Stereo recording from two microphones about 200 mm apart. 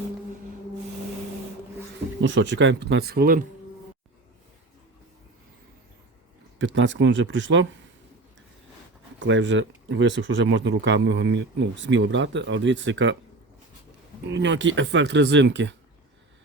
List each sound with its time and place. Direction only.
2.2 s speech: 65° right (ahead or behind); by 3.4 s 50° right (ahead or behind)
6.6 s speech: 65° right (ahead or behind)
9.1 s speech: 65° right (ahead or behind)
14.3 s speech: 65° right (ahead or behind)